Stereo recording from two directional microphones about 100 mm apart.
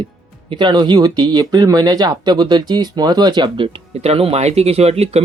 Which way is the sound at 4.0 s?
80° right.